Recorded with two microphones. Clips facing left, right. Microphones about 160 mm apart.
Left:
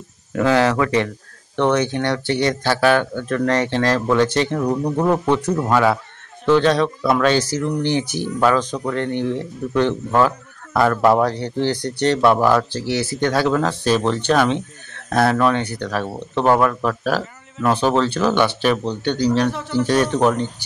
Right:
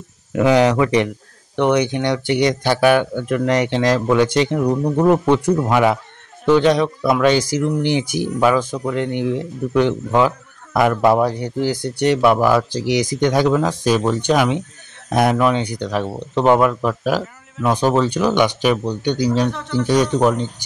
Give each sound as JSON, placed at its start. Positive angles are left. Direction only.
{"t": 0.3, "sound": "speech", "side_deg": -15}
{"t": 19.5, "sound": "speech", "side_deg": 10}
{"t": 19.9, "sound": "speech", "side_deg": -15}